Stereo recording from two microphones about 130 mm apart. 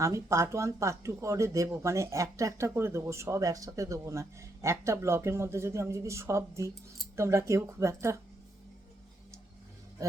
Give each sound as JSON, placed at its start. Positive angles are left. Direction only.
{"t": 0.0, "sound": "speech", "side_deg": -25}